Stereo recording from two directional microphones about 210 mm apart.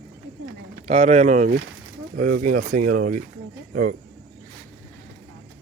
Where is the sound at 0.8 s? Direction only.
30° right (ahead or behind).